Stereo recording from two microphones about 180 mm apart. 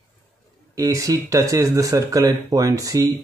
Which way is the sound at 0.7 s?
15° right (ahead or behind).